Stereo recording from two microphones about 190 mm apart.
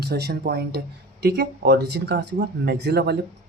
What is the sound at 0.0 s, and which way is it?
Speech, 60° right (ahead or behind).